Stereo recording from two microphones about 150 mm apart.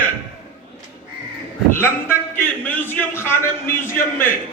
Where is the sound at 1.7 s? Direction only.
15° left (ahead or behind).